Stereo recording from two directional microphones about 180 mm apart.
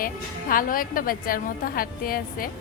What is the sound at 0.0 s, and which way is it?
A woman's voice, 50° left (ahead or behind).